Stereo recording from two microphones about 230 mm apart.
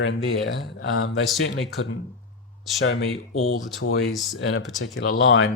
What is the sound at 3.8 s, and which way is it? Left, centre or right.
Speech, left.